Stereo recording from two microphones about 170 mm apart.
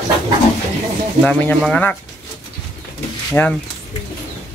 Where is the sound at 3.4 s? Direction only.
10° left (ahead or behind).